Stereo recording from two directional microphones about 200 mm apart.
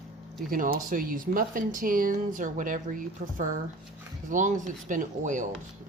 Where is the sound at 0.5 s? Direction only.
45° right (ahead or behind).